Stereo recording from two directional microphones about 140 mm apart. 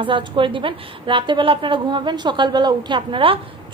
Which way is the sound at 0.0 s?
35° right (ahead or behind).